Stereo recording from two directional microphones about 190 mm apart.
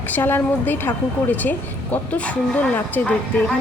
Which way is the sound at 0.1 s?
10° left (ahead or behind).